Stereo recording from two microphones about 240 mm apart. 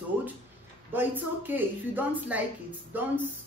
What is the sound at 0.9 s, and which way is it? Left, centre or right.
A woman's voice, centre.